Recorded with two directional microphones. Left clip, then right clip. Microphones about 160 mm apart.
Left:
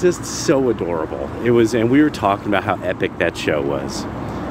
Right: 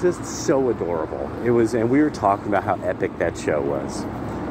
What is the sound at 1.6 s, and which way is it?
Speech, 35° left (ahead or behind).